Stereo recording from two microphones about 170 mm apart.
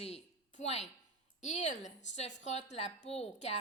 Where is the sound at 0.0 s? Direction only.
40° left (ahead or behind).